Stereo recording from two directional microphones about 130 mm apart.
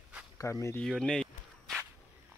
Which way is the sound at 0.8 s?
5° left (ahead or behind).